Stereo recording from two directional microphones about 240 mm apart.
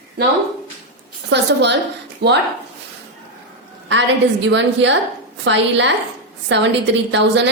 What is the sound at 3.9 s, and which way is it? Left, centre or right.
A woman's voice, right.